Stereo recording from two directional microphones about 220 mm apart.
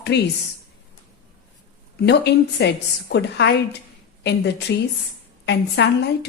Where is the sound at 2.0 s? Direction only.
50° left (ahead or behind).